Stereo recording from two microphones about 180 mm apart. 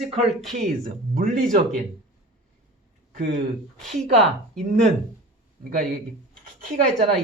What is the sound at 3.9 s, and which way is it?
Speech, 40° right (ahead or behind).